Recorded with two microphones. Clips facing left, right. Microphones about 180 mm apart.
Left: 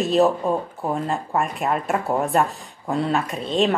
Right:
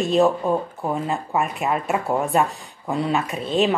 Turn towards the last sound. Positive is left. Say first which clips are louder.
# even
turn(degrees=0)  # may be behind; listen again after turning